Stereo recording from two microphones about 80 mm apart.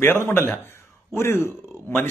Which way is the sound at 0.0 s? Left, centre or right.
Left.